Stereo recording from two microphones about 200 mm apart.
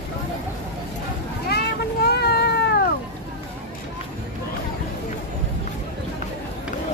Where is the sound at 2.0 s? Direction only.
55° left (ahead or behind).